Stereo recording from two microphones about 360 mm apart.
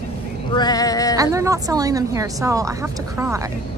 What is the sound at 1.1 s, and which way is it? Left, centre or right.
Speech, centre.